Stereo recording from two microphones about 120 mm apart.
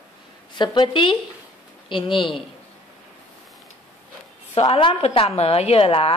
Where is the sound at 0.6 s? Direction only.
40° left (ahead or behind).